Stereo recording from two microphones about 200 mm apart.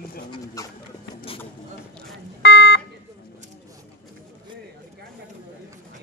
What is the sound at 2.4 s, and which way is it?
Car alarm, 60° left (ahead or behind).